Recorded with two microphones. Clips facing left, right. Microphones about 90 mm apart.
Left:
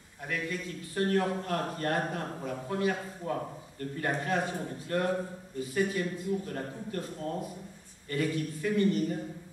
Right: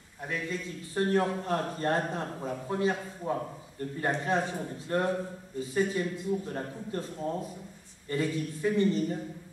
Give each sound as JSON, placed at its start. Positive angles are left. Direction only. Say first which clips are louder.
{"t": 0.3, "sound": "a man's voice", "louder": "even", "side_deg": -25}